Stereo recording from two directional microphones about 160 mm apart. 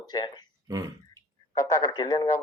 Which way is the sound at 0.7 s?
20° right (ahead or behind).